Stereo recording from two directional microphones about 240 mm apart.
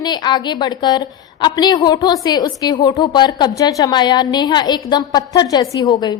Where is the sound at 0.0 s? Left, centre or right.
Centre.